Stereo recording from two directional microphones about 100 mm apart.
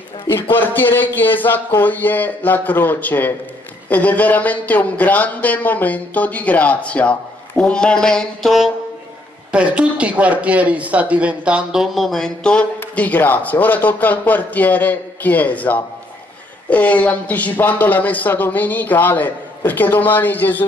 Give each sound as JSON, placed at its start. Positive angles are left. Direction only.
{"t": 0.3, "sound": "speech", "side_deg": 20}
{"t": 9.5, "sound": "speech", "side_deg": -10}